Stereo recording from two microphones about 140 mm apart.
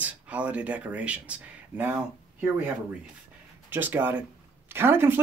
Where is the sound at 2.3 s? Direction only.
15° right (ahead or behind).